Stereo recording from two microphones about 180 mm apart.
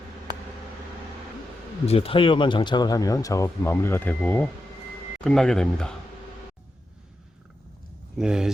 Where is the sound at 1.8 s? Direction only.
35° left (ahead or behind); by 5.9 s 5° left (ahead or behind).